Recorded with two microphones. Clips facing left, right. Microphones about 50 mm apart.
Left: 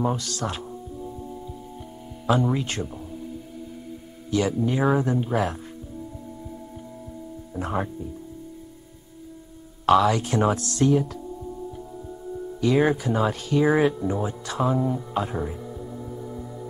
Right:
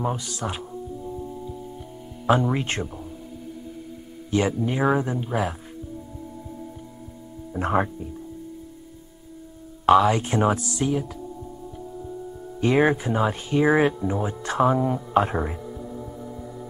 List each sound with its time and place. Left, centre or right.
0.0 s speech: centre
2.5 s speech: right
4.3 s speech: right
4.6 s speech: centre
5.2 s speech: centre
7.5 s speech: right
9.8 s speech: right
12.5 s speech: right
14.4 s speech: right